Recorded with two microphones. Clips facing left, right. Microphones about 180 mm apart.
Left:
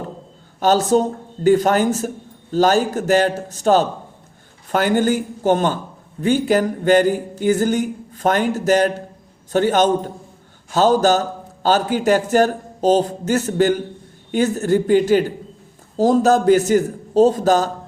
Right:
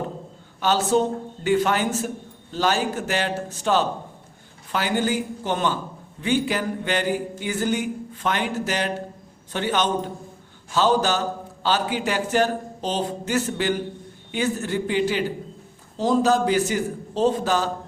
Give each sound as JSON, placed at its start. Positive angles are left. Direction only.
{"t": 0.6, "sound": "speech", "side_deg": 40}